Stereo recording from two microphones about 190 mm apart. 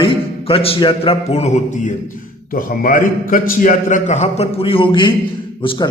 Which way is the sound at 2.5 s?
45° left (ahead or behind).